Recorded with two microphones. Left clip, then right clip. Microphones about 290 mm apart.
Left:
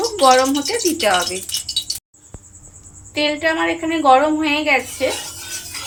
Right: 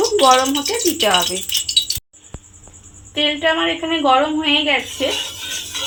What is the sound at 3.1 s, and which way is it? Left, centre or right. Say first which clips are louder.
Speech: right 1 dB; right.